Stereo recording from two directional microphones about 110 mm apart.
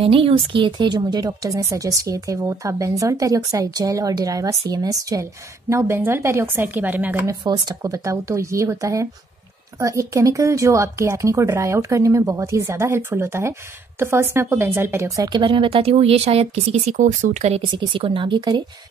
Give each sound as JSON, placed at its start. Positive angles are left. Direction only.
{"t": 0.0, "sound": "a woman's voice", "side_deg": -55}
{"t": 7.4, "sound": "speech", "side_deg": -40}
{"t": 15.2, "sound": "speech", "side_deg": -45}
{"t": 17.6, "sound": "speech", "side_deg": -50}